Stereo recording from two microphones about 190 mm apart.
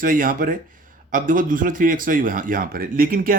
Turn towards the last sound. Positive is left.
turn(degrees=-45)  # may be behind; listen again after turning